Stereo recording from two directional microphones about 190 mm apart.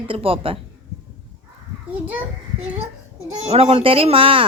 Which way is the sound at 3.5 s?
30° right (ahead or behind).